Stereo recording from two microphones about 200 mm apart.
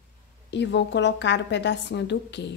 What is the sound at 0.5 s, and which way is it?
A woman's voice, 60° left (ahead or behind).